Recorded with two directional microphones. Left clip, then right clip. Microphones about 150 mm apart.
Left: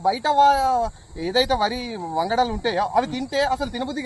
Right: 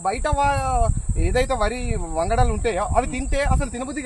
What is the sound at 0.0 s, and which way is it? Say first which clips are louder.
Speech: left 4 dB; 15° right (ahead or behind).